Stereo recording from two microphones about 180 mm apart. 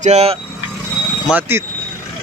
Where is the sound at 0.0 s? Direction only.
35° right (ahead or behind).